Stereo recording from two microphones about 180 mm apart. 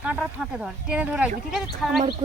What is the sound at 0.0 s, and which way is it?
Speech, 5° right (ahead or behind).